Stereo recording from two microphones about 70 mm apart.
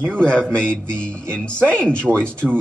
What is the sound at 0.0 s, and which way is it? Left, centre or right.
Speech, centre.